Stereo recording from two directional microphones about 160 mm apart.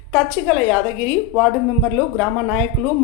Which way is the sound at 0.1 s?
10° left (ahead or behind).